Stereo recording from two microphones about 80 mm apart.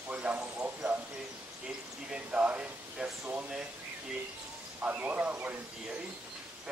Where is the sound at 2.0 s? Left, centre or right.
Centre.